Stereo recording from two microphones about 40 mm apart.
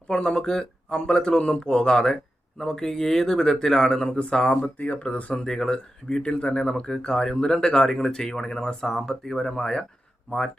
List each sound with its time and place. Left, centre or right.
0.1 s speech: left
4.2 s speech: left
4.6 s speech: left
5.3 s speech: centre
10.3 s speech: left